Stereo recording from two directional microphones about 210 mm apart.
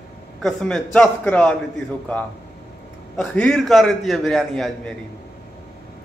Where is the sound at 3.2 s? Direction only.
Centre (ahead or behind).